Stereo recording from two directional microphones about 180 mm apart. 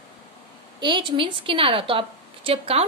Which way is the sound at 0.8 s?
25° right (ahead or behind).